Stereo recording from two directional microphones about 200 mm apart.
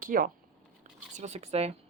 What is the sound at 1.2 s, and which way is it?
Speech, 35° right (ahead or behind).